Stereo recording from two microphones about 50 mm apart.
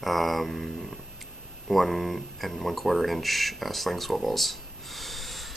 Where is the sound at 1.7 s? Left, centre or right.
Centre.